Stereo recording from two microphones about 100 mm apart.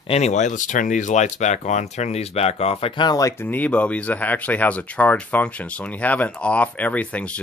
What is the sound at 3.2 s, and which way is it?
Speech, 30° left (ahead or behind).